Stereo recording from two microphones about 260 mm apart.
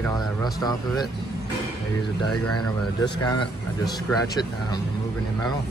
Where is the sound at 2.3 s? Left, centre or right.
Left.